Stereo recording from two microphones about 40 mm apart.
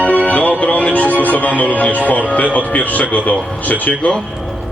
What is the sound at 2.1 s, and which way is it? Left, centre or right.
Speech, left.